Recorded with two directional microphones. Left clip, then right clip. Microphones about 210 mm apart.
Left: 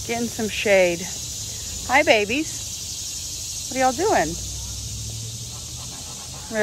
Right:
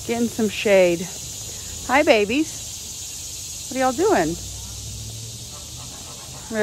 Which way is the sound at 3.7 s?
15° right (ahead or behind).